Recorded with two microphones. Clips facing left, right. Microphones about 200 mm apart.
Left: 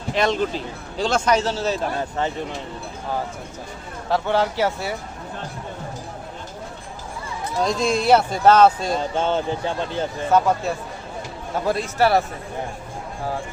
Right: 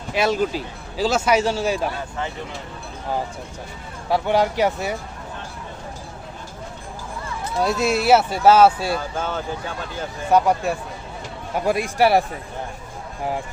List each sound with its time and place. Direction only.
0.1 s a man's voice: 10° right (ahead or behind)
4.1 s a man's voice: 15° right (ahead or behind)
7.6 s a man's voice: 5° right (ahead or behind)
9.0 s speech: 30° left (ahead or behind)
10.3 s a man's voice: 15° right (ahead or behind)